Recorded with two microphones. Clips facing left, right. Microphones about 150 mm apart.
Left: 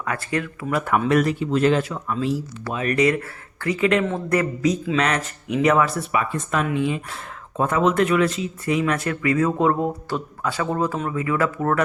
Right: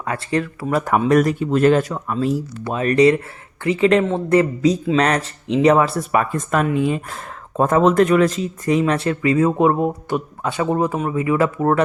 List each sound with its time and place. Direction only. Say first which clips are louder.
0.0 s speech: right 4 dB; 30° right (ahead or behind)
6.1 s speech: right 4 dB; 50° right (ahead or behind); by 11.8 s 25° right (ahead or behind)